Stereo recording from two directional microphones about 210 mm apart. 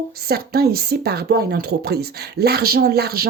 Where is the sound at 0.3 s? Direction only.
45° right (ahead or behind).